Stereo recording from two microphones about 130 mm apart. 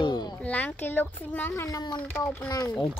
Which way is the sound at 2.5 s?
30° left (ahead or behind).